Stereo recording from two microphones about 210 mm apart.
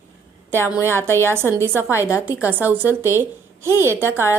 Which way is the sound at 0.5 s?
10° right (ahead or behind).